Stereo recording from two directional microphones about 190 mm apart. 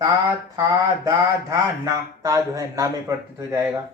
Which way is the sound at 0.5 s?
15° right (ahead or behind).